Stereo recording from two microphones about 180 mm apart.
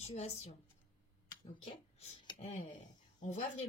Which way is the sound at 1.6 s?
30° left (ahead or behind).